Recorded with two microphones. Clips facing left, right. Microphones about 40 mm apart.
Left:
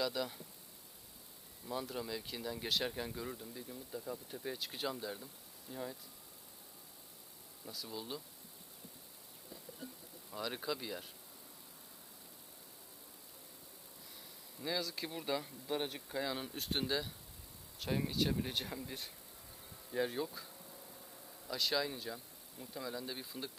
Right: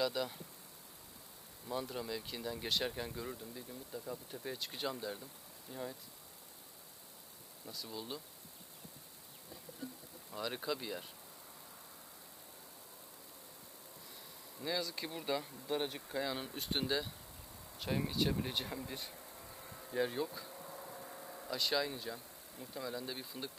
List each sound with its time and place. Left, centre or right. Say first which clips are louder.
0.0 s speech: right 1 dB; centre
1.7 s speech: right 1 dB; centre
7.6 s speech: even; centre
10.3 s speech: right 1 dB; centre
14.6 s speech: even; centre
19.4 s a sound: right 4 dB; right
19.9 s speech: right 1 dB; centre
20.5 s a sound: right 7 dB; right
21.5 s speech: even; centre